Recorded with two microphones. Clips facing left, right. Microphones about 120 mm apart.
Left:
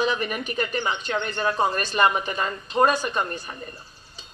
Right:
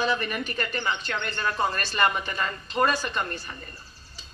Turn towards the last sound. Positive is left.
turn(degrees=15)  # may be behind; listen again after turning